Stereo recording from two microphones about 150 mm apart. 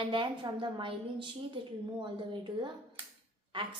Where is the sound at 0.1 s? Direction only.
35° right (ahead or behind).